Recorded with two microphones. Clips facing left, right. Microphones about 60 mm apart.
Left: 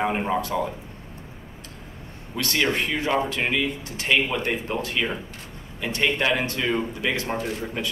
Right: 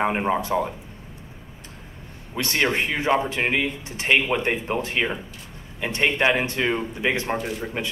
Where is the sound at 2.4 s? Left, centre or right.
Right.